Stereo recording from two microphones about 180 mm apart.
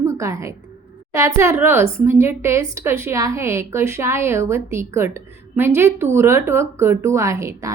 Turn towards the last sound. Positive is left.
turn(degrees=-15)  # may be behind; listen again after turning